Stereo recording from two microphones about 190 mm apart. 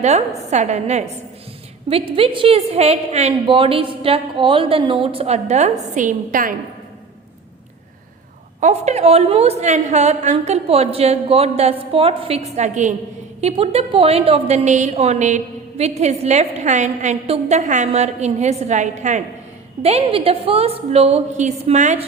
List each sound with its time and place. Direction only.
0.0 s a woman's voice: 35° right (ahead or behind)
2.1 s a woman's voice: 30° right (ahead or behind); by 6.6 s 45° right (ahead or behind)
8.6 s a woman's voice: 35° right (ahead or behind)